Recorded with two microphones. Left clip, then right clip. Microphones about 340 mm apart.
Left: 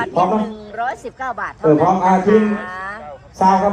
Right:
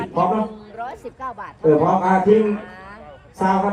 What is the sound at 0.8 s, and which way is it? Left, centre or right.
A man's voice, left.